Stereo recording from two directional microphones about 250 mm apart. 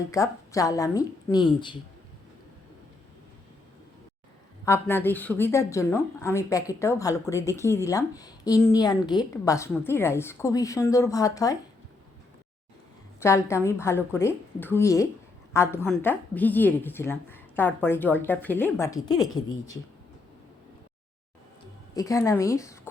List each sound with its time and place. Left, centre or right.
0.1 s a woman's voice: centre
4.6 s a woman's voice: centre
13.1 s a woman's voice: centre
21.9 s a woman's voice: centre